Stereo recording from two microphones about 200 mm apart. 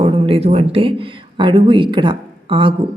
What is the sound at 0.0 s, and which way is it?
Speech, 30° right (ahead or behind).